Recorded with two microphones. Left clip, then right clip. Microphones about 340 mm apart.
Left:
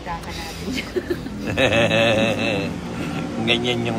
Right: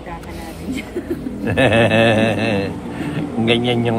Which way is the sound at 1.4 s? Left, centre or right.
Centre.